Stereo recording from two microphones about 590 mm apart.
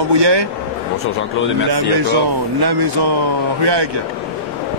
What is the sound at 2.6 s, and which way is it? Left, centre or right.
Speech, right.